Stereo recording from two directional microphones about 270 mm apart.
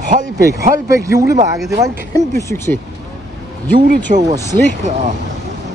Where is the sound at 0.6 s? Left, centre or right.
Centre.